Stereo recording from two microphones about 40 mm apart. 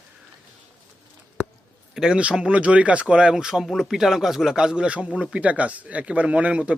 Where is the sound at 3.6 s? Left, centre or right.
Centre; by 5.2 s right.